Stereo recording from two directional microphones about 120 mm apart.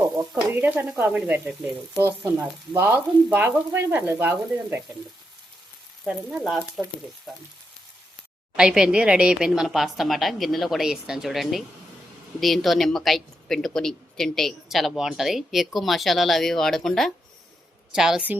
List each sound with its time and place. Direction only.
0.5 s frying: 15° right (ahead or behind)
6.1 s a woman's voice: 5° right (ahead or behind)
8.5 s a woman's voice: 5° right (ahead or behind)